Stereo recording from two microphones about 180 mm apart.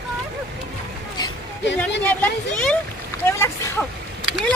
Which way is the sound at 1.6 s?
80° left.